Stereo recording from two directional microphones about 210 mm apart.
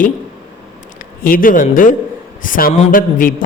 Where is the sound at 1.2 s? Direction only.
40° left (ahead or behind).